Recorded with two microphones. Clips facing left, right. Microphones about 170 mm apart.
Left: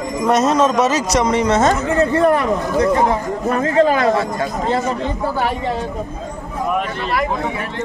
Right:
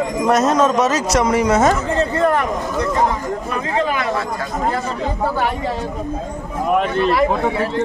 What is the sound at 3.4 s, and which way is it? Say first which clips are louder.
Speech: left 8 dB; 45° left (ahead or behind).